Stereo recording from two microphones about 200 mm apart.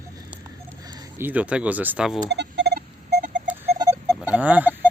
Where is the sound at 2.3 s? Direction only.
60° right (ahead or behind).